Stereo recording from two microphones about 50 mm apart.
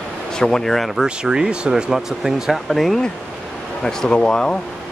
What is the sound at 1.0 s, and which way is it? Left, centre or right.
Speech, centre.